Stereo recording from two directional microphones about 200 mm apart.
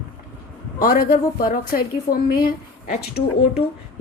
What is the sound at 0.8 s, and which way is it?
A woman's voice, 45° left (ahead or behind).